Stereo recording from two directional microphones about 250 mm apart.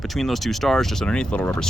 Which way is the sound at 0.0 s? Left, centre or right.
Centre.